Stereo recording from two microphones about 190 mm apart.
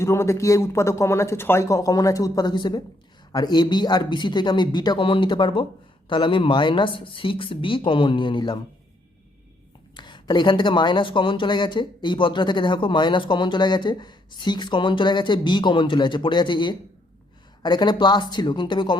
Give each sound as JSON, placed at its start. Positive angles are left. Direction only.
{"t": 0.0, "sound": "speech", "side_deg": 15}
{"t": 9.9, "sound": "speech", "side_deg": 25}